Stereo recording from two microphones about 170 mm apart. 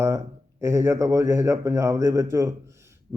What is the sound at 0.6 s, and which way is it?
Speech, 15° right (ahead or behind).